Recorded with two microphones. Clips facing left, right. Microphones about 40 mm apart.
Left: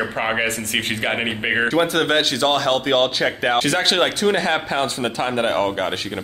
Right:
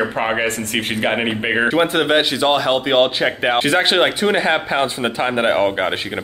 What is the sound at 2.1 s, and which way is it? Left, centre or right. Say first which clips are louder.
Speech: right 3 dB; centre.